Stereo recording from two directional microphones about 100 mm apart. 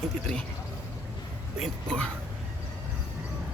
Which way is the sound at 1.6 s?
10° left (ahead or behind).